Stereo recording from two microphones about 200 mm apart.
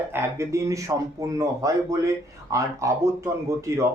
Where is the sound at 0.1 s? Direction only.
15° right (ahead or behind).